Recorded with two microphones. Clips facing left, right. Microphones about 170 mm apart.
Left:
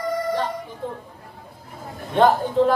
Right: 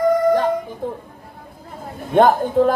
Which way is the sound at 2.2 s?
50° right (ahead or behind).